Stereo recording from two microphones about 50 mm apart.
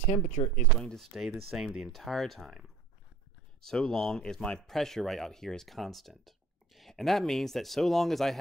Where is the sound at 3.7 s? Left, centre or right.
Centre.